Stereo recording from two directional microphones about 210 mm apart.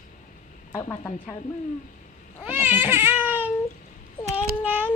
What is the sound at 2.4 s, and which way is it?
Baby cry, 10° right (ahead or behind).